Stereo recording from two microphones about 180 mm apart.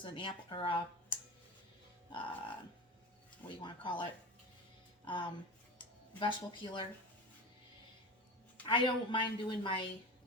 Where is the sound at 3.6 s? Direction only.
25° left (ahead or behind).